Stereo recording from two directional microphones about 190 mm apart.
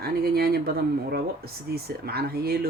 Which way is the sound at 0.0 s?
55° right (ahead or behind).